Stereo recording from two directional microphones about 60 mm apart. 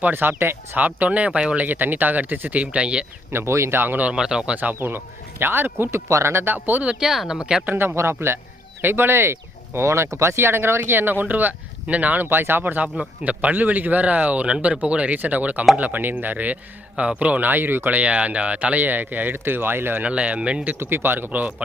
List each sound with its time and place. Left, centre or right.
0.0 s speech: right
0.8 s speech: right
1.6 s speech: right
3.3 s speech: right
3.8 s speech: right
4.1 s speech: centre
4.5 s speech: right
4.8 s speech: right
7.0 s speech: centre
7.6 s speech: right
7.9 s speech: right
20.1 s speech: right
20.7 s speech: right